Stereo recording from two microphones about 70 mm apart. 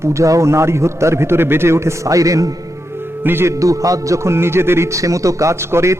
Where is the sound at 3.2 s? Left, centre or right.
Right.